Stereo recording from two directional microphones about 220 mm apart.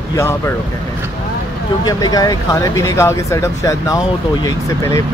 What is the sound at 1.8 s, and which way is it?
Speech, 15° left (ahead or behind).